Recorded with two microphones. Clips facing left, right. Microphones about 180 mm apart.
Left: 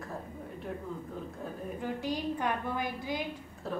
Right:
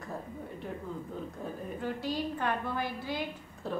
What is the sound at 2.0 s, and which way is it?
A woman's voice, 15° left (ahead or behind).